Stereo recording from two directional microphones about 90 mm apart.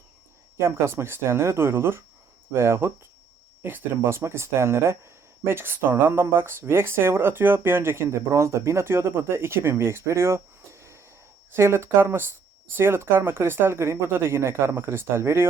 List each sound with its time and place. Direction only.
0.6 s speech: 30° right (ahead or behind)